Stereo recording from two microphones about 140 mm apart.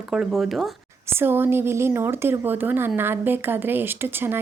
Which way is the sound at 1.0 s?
15° right (ahead or behind).